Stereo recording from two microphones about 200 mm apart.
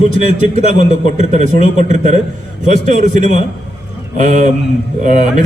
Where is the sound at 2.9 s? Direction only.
40° right (ahead or behind).